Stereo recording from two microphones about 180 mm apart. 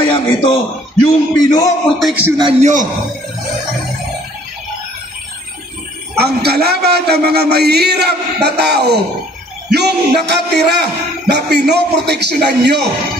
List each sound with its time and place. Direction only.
0.1 s a man's voice: 25° left (ahead or behind)
2.0 s speech: centre (ahead or behind)
2.6 s a man's voice: 45° right (ahead or behind)
6.1 s a man's voice: 60° right (ahead or behind)